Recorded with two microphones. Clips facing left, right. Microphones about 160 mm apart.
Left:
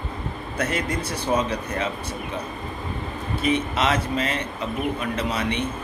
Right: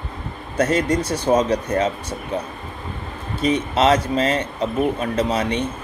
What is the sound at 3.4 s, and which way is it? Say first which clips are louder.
A man's voice: right 5 dB; 30° right (ahead or behind).